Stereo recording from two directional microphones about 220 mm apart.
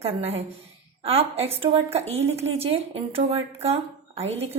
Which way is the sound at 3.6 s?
25° right (ahead or behind).